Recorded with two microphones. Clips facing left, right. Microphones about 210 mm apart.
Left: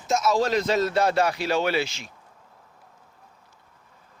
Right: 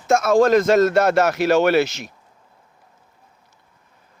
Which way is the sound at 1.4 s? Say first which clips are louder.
Right 8 dB; 70° right (ahead or behind).